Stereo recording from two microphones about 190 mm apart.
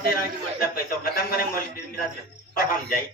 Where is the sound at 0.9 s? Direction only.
50° left (ahead or behind).